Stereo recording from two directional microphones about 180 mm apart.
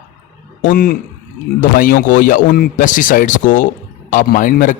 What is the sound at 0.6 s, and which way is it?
Speech, 55° left (ahead or behind).